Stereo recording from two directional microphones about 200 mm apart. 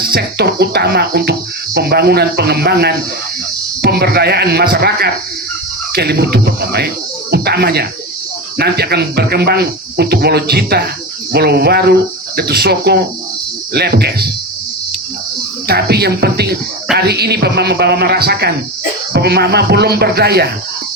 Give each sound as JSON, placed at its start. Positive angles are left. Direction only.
{"t": 0.1, "sound": "music", "side_deg": -55}
{"t": 15.6, "sound": "music", "side_deg": -55}